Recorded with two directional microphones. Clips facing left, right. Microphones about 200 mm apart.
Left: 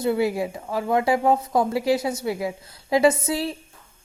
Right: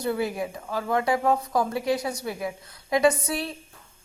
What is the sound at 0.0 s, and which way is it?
A woman's voice, 25° left (ahead or behind).